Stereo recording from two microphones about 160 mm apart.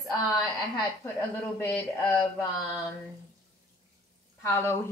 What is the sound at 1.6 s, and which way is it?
Speech, 10° left (ahead or behind).